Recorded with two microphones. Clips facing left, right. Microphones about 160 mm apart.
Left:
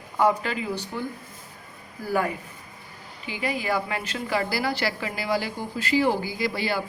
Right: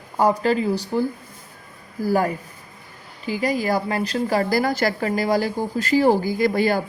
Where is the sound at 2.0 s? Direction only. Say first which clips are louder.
Right 5 dB; 40° right (ahead or behind).